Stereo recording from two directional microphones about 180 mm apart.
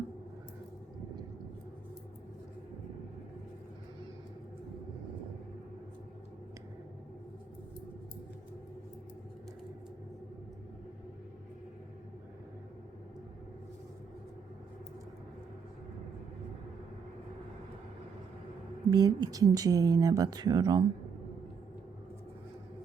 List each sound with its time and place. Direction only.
18.9 s speech: 25° right (ahead or behind)